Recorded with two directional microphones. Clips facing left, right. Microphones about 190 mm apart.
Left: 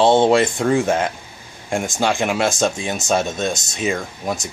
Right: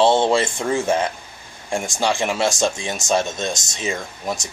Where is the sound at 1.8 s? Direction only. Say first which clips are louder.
Left 1 dB; 20° left (ahead or behind).